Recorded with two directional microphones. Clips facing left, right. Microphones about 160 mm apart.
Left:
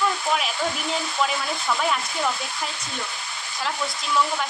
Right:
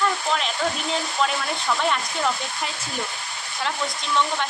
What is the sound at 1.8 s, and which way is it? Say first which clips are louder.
Speech: right 1 dB; 5° left (ahead or behind).